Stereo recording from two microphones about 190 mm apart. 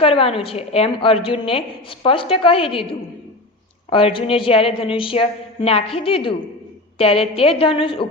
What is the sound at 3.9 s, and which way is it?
A woman's voice, 30° left (ahead or behind).